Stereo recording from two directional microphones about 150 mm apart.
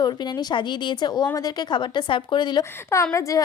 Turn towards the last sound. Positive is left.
turn(degrees=20)  # may be behind; listen again after turning